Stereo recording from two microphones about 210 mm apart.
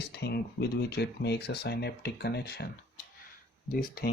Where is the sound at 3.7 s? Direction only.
45° left (ahead or behind).